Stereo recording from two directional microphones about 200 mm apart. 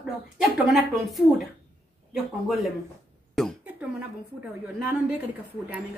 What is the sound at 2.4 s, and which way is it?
Speech, centre (ahead or behind).